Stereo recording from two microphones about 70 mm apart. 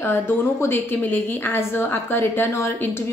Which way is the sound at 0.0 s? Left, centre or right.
Left.